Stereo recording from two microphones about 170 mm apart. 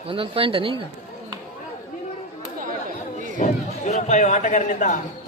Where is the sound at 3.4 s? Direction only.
45° left (ahead or behind).